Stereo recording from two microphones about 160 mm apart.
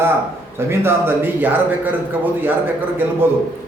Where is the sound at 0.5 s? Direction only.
15° right (ahead or behind).